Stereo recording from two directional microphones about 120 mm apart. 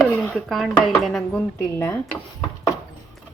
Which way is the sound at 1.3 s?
20° left (ahead or behind).